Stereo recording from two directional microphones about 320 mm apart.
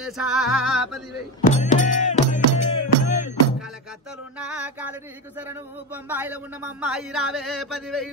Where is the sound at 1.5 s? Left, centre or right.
Left.